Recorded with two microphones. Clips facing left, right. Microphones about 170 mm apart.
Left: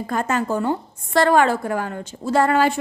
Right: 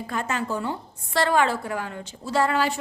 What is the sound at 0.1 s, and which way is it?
A woman's voice, 45° left (ahead or behind).